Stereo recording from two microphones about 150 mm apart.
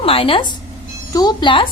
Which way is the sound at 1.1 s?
25° left (ahead or behind).